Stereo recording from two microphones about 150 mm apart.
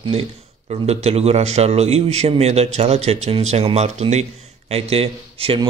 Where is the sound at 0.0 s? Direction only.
40° right (ahead or behind).